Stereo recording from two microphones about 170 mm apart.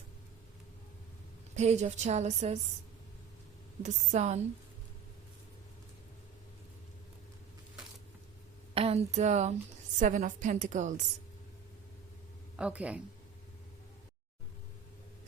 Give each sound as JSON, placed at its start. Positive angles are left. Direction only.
{"t": 1.5, "sound": "a woman's voice", "side_deg": -40}
{"t": 3.8, "sound": "a woman's voice", "side_deg": -40}
{"t": 8.7, "sound": "a woman's voice", "side_deg": -35}
{"t": 12.5, "sound": "speech", "side_deg": -5}